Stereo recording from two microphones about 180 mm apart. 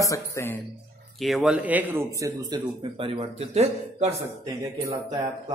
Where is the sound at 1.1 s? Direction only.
Centre (ahead or behind); by 4.2 s 35° right (ahead or behind).